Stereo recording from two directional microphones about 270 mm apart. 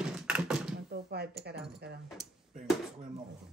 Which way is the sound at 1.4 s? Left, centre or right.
Right.